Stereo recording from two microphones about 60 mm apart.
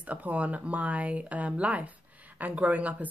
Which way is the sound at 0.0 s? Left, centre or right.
Right.